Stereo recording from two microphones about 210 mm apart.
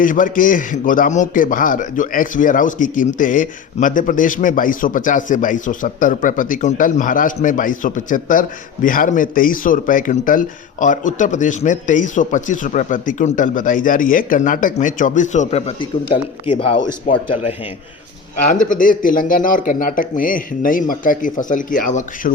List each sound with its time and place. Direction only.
0.0 s a man's voice: 40° left (ahead or behind)
18.5 s a man's voice: 40° left (ahead or behind)